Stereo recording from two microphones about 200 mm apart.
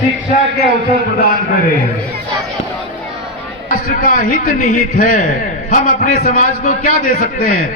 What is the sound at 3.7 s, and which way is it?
A man's voice, 40° left (ahead or behind).